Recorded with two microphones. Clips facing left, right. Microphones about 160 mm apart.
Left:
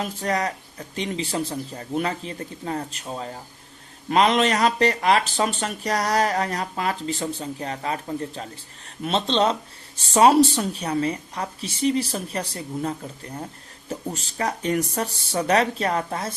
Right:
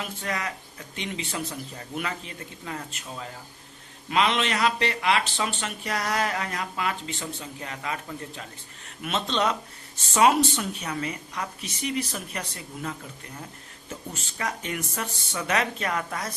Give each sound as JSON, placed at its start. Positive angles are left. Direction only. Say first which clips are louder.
{"t": 0.0, "sound": "speech", "louder": "left 7 dB", "side_deg": 35}